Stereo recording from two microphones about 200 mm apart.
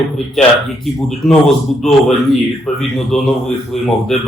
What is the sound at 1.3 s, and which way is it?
Speech, centre (ahead or behind).